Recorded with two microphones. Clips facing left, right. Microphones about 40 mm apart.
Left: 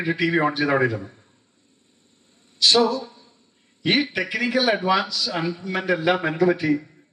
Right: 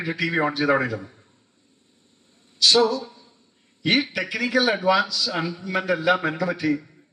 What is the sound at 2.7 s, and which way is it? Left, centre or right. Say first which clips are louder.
Speech: even; centre.